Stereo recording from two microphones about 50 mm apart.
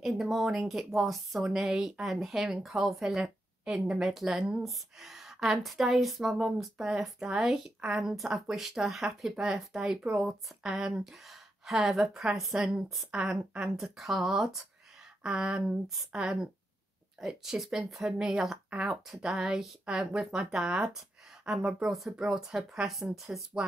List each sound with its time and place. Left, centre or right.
0.0 s a woman's voice: centre
15.2 s a woman's voice: centre
22.8 s speech: centre